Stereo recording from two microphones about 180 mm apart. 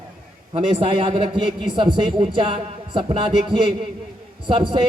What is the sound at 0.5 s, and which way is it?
Speech, 30° right (ahead or behind).